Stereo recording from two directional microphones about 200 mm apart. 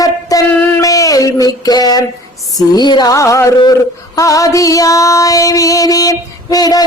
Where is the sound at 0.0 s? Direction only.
15° left (ahead or behind).